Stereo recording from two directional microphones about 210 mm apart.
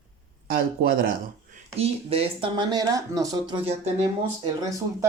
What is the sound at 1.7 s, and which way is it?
Speech, 30° right (ahead or behind).